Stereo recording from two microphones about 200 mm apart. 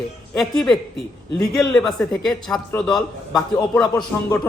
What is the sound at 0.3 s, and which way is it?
A man's voice, centre (ahead or behind).